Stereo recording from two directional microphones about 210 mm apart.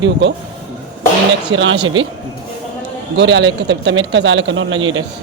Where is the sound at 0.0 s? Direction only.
55° right (ahead or behind).